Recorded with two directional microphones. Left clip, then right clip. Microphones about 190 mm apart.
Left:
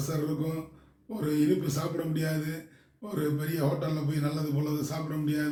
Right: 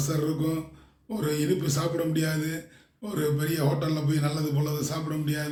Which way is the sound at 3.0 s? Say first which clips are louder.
Right 3 dB; 20° right (ahead or behind).